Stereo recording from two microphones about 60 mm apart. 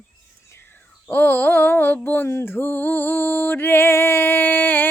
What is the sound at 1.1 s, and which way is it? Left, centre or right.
Music, left.